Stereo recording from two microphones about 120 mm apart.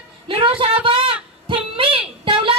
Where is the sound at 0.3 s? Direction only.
45° right (ahead or behind).